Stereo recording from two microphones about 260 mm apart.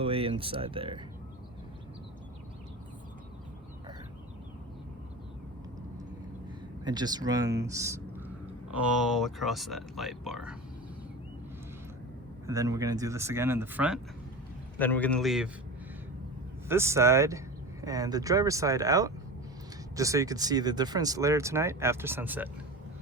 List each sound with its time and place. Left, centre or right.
0.0 s speech: right
6.8 s speech: centre
12.5 s speech: centre
14.8 s speech: centre
16.6 s speech: centre